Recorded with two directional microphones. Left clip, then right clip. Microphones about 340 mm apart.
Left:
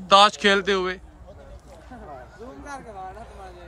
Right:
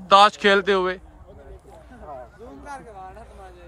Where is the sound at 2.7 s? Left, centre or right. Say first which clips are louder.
Left 1 dB; left.